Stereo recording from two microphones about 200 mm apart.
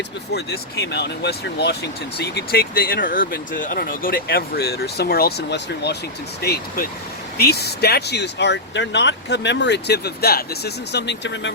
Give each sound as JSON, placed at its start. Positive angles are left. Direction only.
{"t": 0.3, "sound": "speech", "side_deg": 55}